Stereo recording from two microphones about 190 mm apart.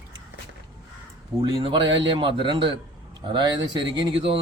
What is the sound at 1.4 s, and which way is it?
Speech, 25° right (ahead or behind).